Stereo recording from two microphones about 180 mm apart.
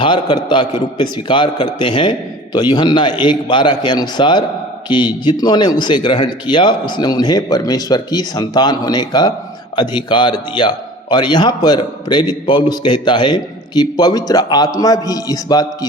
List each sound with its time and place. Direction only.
0.0 s a man's voice: 25° left (ahead or behind)